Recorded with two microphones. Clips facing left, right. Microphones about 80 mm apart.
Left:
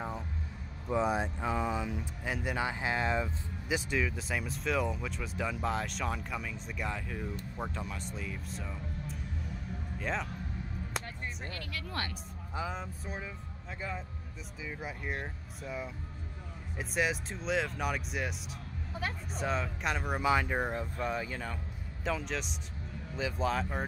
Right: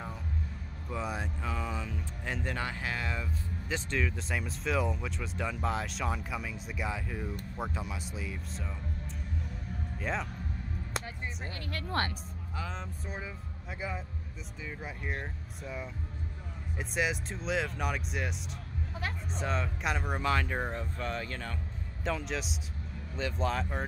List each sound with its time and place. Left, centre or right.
0.8 s speech: left
3.6 s a man's voice: centre
11.7 s speech: right
12.5 s speech: centre
13.7 s speech: centre
14.6 s speech: centre